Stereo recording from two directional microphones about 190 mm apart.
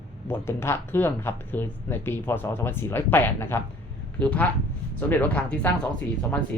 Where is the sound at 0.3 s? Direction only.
15° left (ahead or behind).